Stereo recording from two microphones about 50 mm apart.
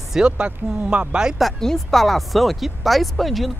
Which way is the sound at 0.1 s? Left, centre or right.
Centre.